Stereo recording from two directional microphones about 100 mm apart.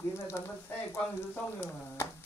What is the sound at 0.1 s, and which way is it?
Speech, 25° left (ahead or behind).